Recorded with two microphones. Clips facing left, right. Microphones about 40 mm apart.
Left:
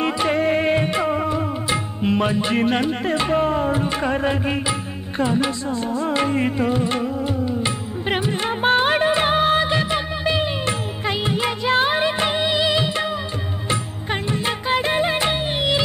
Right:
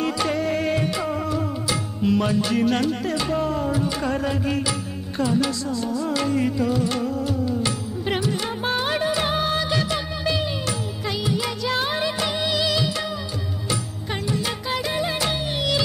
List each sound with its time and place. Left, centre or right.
0.0 s music: left
14.3 s music: left